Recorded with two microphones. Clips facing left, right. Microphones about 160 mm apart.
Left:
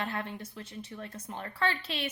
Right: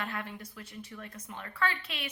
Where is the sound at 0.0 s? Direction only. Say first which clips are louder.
Left 3 dB; 30° left (ahead or behind).